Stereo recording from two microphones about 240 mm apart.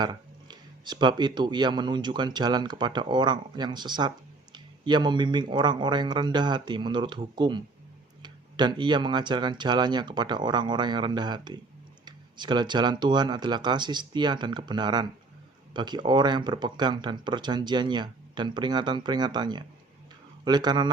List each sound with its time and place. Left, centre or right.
0.0 s speech: centre